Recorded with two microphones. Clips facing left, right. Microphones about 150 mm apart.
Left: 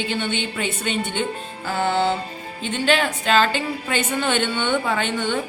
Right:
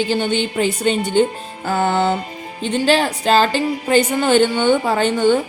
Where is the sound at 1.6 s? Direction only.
45° right (ahead or behind).